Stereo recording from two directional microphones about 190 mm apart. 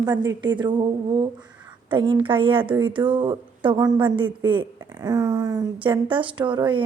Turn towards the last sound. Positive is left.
turn(degrees=-25)  # may be behind; listen again after turning